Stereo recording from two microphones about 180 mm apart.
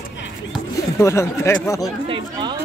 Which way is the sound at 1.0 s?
15° left (ahead or behind).